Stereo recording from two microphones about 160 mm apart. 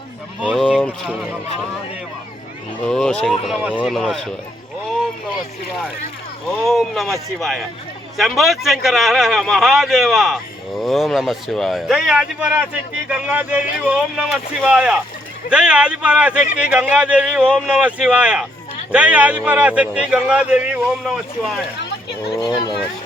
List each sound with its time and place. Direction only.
0.5 s a man's voice: 5° left (ahead or behind)
2.8 s a man's voice: 5° left (ahead or behind)
6.7 s a man's voice: centre (ahead or behind)
22.3 s speech: 25° left (ahead or behind)